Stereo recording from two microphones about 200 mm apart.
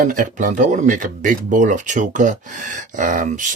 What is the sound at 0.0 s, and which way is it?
Speech, 40° right (ahead or behind).